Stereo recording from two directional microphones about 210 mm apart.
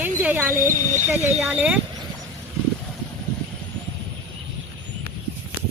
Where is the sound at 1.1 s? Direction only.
10° right (ahead or behind).